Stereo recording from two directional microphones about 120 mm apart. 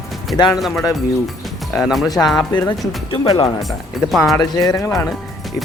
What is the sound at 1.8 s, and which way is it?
Speech, centre (ahead or behind).